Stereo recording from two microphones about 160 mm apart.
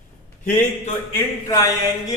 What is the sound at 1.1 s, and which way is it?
Speech, 20° left (ahead or behind).